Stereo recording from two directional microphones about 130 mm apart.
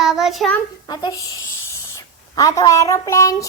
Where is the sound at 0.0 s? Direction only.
5° right (ahead or behind).